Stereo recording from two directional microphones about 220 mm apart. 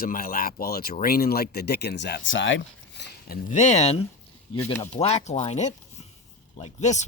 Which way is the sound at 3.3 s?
35° left (ahead or behind).